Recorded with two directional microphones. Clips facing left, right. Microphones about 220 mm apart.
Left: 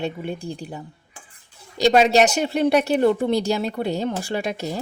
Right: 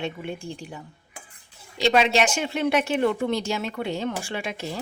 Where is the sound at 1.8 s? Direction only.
40° left (ahead or behind).